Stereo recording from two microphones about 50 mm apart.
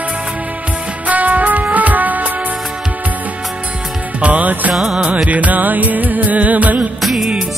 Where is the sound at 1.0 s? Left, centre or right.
Right.